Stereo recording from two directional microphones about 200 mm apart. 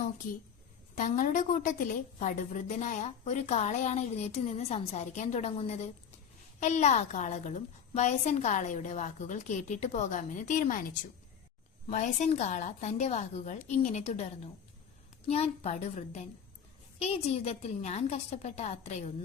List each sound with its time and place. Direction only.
0.9 s a woman's voice: 40° left (ahead or behind)
11.9 s a woman's voice: 35° left (ahead or behind)